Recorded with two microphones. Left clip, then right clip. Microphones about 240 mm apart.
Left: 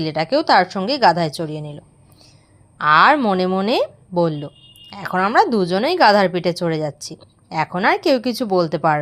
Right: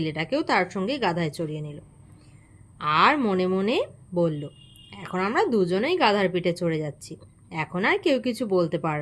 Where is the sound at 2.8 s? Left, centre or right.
Centre.